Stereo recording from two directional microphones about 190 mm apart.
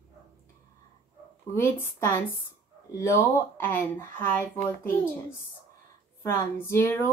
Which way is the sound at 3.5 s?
10° left (ahead or behind).